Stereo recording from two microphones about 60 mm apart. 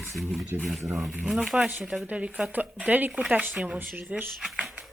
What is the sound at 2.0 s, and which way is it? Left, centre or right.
Speech, right.